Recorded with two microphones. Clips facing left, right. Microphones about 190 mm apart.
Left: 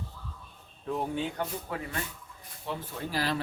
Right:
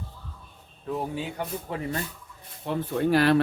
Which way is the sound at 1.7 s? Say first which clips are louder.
Right 3 dB; 25° right (ahead or behind).